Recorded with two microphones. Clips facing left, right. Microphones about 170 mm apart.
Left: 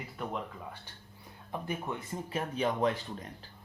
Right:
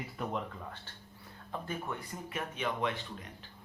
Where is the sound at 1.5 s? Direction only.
20° left (ahead or behind).